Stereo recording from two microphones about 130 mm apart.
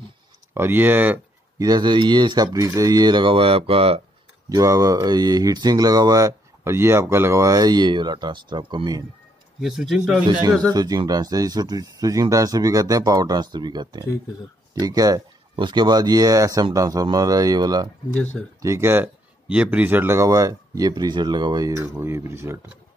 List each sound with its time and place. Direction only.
0.6 s speech: 15° right (ahead or behind)
1.6 s speech: 30° right (ahead or behind); by 4.0 s 45° right (ahead or behind)
4.6 s speech: 25° right (ahead or behind)
9.6 s speech: centre (ahead or behind)
10.7 s speech: 30° right (ahead or behind)
18.1 s speech: 10° left (ahead or behind)
18.6 s speech: 20° right (ahead or behind)
19.4 s speech: 10° right (ahead or behind)